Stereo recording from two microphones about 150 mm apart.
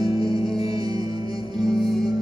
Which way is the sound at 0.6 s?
25° right (ahead or behind).